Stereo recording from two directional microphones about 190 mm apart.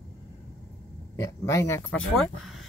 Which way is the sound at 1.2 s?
15° left (ahead or behind).